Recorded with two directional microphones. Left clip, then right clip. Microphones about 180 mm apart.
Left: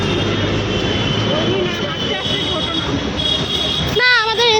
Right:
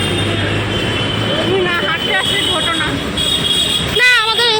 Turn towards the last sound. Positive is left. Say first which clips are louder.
# right 2 dB
turn(degrees=35)  # may be behind; listen again after turning